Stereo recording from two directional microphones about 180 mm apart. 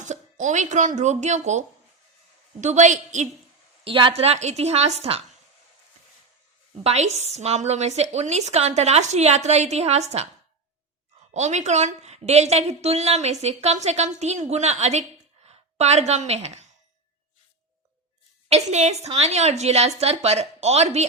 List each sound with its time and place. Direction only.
0.0 s a woman's voice: 40° right (ahead or behind)
3.8 s a woman's voice: 30° right (ahead or behind)
6.8 s a woman's voice: 40° right (ahead or behind)
11.3 s a woman's voice: 40° right (ahead or behind)
18.4 s a woman's voice: 40° right (ahead or behind)